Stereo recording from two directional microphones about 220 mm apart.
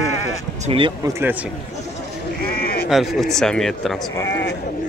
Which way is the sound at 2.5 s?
45° left (ahead or behind).